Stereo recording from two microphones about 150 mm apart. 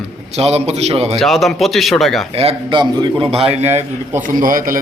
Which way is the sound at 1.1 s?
Centre (ahead or behind).